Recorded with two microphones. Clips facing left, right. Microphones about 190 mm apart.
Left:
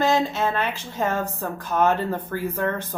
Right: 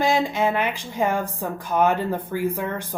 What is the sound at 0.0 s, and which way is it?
Speech, 15° right (ahead or behind).